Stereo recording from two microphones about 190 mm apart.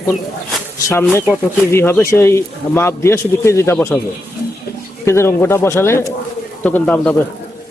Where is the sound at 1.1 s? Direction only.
10° left (ahead or behind).